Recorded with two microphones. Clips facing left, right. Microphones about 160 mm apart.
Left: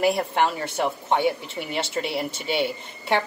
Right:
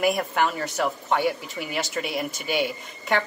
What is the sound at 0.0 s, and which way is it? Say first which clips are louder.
A man's voice: left 1 dB; 30° left (ahead or behind).